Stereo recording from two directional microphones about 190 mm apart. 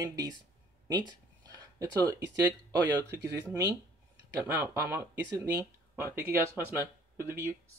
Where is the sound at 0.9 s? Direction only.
20° right (ahead or behind).